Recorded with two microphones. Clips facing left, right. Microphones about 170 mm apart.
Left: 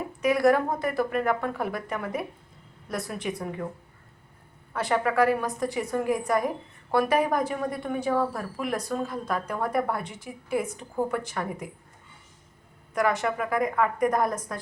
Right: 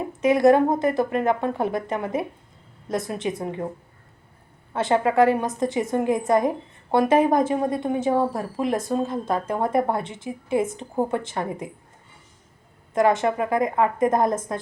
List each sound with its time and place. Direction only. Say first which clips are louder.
0.2 s a woman's voice: right 5 dB; 25° right (ahead or behind)
4.7 s a woman's voice: right 5 dB; 25° right (ahead or behind)
12.9 s a woman's voice: right 6 dB; 25° right (ahead or behind)